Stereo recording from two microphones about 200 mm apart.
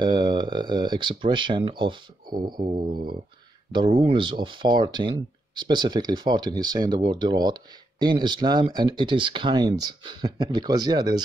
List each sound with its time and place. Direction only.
0.0 s speech: 20° right (ahead or behind)